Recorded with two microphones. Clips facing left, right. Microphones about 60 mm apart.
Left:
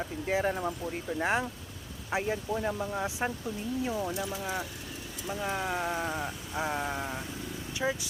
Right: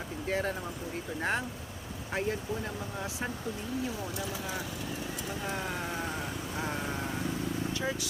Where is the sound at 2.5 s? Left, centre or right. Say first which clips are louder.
Left 5 dB; left.